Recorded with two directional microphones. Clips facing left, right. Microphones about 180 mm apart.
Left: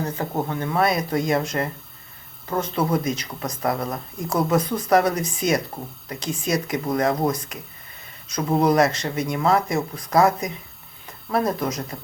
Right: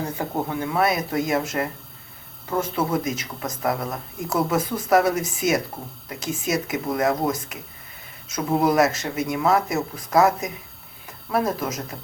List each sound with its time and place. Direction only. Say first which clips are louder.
0.4 s speech: even; 10° right (ahead or behind)